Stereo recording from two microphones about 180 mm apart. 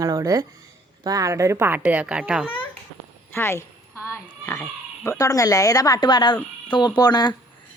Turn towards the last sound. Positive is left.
turn(degrees=20)  # may be behind; listen again after turning